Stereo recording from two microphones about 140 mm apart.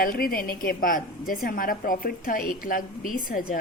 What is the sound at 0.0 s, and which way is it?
A woman's voice, 90° left.